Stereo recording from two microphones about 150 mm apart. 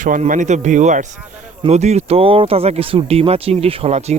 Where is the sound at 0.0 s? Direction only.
60° right (ahead or behind).